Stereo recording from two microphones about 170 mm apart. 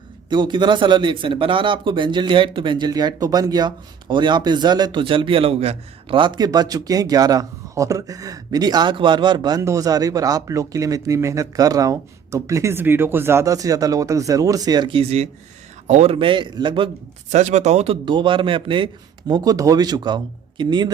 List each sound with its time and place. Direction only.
0.3 s a man's voice: 25° right (ahead or behind)
17.2 s a man's voice: 45° right (ahead or behind); by 20.9 s 25° right (ahead or behind)